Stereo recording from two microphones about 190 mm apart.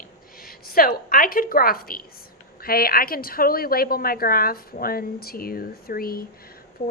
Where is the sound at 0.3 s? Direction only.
50° left (ahead or behind).